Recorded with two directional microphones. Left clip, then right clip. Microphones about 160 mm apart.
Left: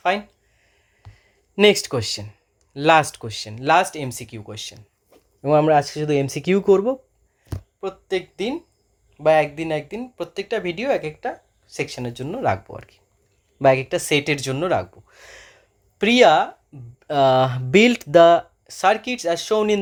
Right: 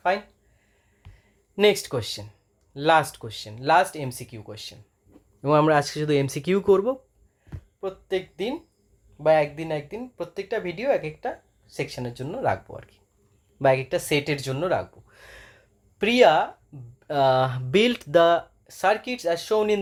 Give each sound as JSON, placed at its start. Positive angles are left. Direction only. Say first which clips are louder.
{"t": 1.1, "sound": "a sound", "louder": "left 5 dB", "side_deg": 30}
{"t": 2.7, "sound": "speech", "louder": "left 4 dB", "side_deg": 35}
{"t": 5.4, "sound": "speech", "louder": "left 3 dB", "side_deg": 0}
{"t": 6.4, "sound": "speech", "louder": "left 4 dB", "side_deg": 10}
{"t": 7.8, "sound": "speech", "louder": "left 3 dB", "side_deg": 35}